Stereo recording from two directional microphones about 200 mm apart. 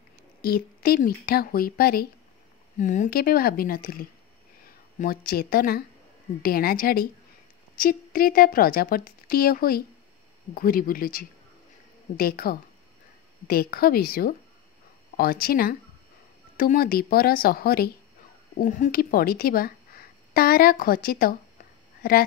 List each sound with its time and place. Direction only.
0.4 s a woman's voice: 50° left (ahead or behind)
2.8 s a woman's voice: 40° left (ahead or behind)
18.6 s speech: 40° left (ahead or behind)